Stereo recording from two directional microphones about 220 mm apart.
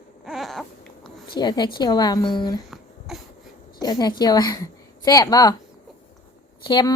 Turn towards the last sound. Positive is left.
turn(degrees=20)  # may be behind; listen again after turning